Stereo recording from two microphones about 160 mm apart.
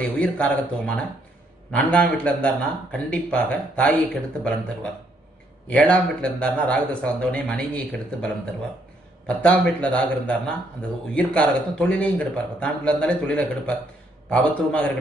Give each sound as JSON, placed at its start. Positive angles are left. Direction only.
{"t": 0.0, "sound": "speech", "side_deg": 10}
{"t": 5.7, "sound": "speech", "side_deg": 5}
{"t": 9.4, "sound": "speech", "side_deg": 5}